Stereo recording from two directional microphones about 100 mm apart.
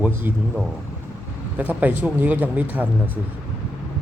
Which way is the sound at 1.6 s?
15° right (ahead or behind).